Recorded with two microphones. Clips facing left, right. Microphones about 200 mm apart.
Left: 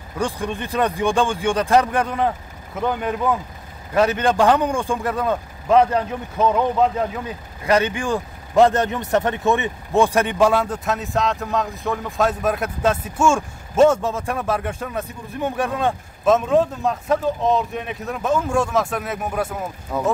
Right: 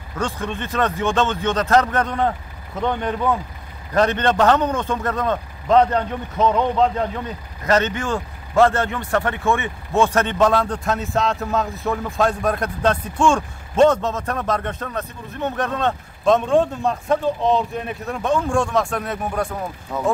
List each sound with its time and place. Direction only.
0.2 s a man's voice: 15° left (ahead or behind)